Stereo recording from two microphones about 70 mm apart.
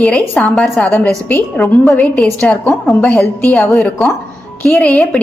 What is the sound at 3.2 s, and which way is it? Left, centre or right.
Speech, left.